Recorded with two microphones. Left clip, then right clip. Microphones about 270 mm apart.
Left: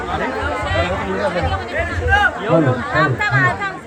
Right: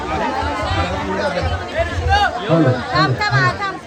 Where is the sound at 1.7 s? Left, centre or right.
Right.